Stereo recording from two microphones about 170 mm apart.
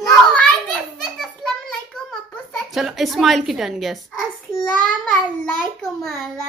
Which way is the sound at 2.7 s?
Centre (ahead or behind).